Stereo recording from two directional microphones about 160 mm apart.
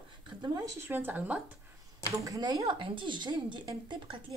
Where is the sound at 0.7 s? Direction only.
15° right (ahead or behind).